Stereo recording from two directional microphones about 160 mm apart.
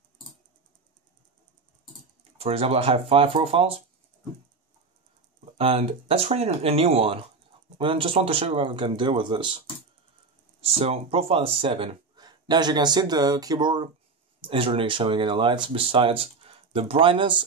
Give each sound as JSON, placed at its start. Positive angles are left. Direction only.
{"t": 2.3, "sound": "speech", "side_deg": -40}
{"t": 5.4, "sound": "speech", "side_deg": -35}
{"t": 10.6, "sound": "speech", "side_deg": -35}